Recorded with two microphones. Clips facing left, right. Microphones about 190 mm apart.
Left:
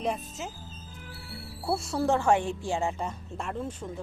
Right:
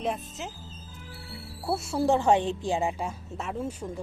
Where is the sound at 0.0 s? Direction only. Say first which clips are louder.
Even; centre (ahead or behind).